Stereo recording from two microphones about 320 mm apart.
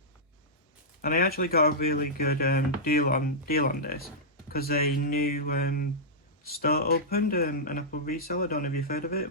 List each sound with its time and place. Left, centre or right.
1.0 s speech: left